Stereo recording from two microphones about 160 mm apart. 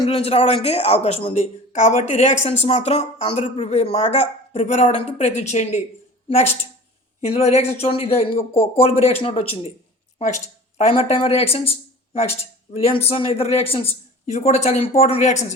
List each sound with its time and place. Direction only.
0.0 s speech: 40° left (ahead or behind)
12.7 s speech: 35° left (ahead or behind)